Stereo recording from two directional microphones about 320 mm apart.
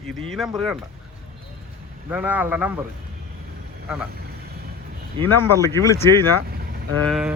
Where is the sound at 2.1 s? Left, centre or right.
Centre.